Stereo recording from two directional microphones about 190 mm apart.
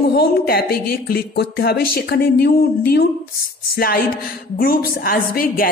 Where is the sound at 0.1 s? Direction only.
55° left (ahead or behind).